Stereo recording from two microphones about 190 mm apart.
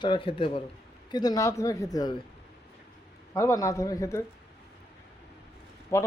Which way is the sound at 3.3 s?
15° left (ahead or behind).